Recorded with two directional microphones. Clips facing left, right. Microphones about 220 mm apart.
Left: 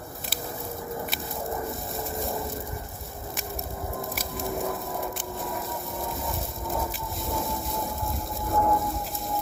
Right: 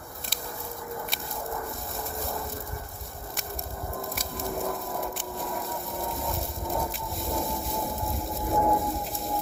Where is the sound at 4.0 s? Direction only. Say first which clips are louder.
Even; centre (ahead or behind).